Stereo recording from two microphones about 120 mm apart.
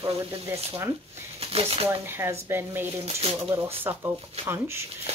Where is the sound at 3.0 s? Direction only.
60° right (ahead or behind).